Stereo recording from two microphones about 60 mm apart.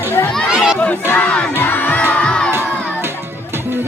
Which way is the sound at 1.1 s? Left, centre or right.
Left.